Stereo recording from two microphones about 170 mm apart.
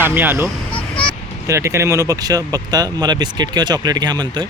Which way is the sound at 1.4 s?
15° right (ahead or behind).